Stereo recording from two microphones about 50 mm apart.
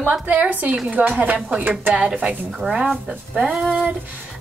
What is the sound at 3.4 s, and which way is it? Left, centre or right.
Speech, centre.